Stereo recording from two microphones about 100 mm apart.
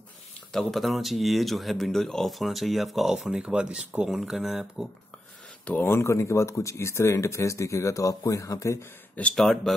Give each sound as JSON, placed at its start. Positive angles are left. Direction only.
{"t": 0.5, "sound": "speech", "side_deg": 0}
{"t": 5.7, "sound": "speech", "side_deg": 20}
{"t": 9.3, "sound": "speech", "side_deg": 5}